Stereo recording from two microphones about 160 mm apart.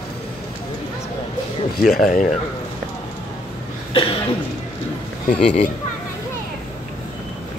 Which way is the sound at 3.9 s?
35° left (ahead or behind).